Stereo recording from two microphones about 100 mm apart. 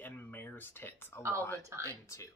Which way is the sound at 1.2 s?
30° right (ahead or behind).